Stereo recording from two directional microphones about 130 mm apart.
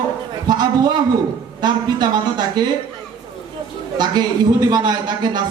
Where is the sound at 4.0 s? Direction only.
30° right (ahead or behind).